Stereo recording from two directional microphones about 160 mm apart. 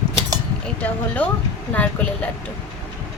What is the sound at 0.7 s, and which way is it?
A woman's voice, 10° left (ahead or behind).